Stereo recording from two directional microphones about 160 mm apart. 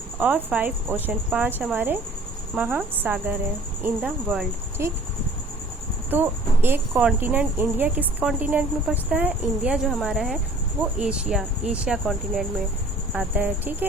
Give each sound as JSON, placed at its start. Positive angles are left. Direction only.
{"t": 0.2, "sound": "speech", "side_deg": -10}
{"t": 6.1, "sound": "speech", "side_deg": -15}